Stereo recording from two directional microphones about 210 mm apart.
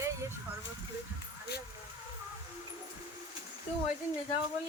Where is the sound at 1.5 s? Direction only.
50° left (ahead or behind).